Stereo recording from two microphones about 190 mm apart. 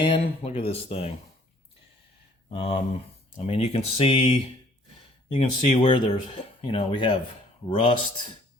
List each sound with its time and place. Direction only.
0.0 s speech: 30° left (ahead or behind)
2.5 s speech: 30° left (ahead or behind)
5.3 s speech: 35° left (ahead or behind)